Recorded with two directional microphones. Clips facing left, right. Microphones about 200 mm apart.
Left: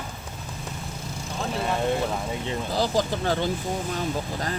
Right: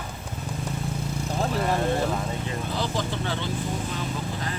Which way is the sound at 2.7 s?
40° left (ahead or behind).